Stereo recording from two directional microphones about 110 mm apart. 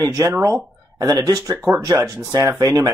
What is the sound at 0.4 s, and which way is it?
Speech, 30° right (ahead or behind).